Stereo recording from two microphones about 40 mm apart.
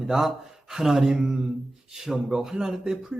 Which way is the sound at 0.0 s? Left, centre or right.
Centre.